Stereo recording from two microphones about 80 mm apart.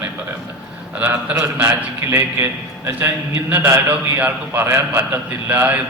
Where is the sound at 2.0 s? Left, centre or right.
Right.